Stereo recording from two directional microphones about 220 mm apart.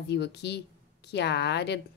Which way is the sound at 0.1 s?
50° left (ahead or behind).